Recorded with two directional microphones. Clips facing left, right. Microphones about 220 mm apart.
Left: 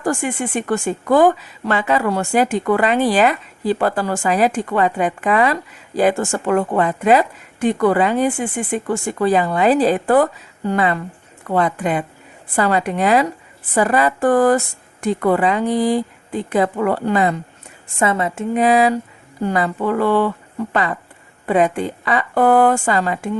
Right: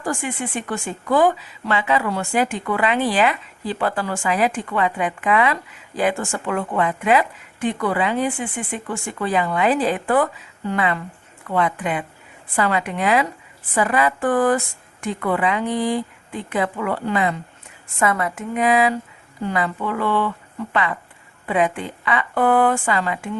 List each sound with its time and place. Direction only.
0.0 s a woman's voice: 45° left (ahead or behind)
18.0 s a woman's voice: 25° left (ahead or behind)